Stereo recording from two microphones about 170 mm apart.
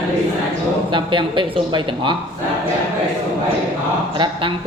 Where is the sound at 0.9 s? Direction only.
30° right (ahead or behind).